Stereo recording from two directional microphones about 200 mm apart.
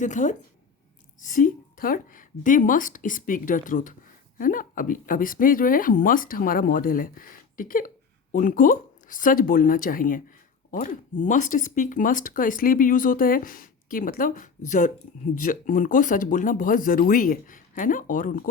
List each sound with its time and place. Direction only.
0.0 s a woman's voice: 40° left (ahead or behind)